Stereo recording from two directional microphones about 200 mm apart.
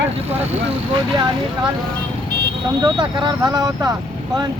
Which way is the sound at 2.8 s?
20° right (ahead or behind).